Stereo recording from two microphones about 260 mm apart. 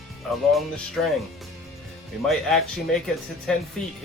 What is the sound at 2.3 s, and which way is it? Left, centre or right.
Speech, centre.